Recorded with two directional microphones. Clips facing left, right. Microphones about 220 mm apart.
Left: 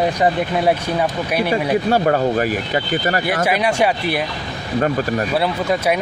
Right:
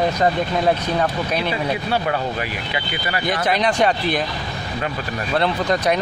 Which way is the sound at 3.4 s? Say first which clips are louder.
Even; 10° left (ahead or behind).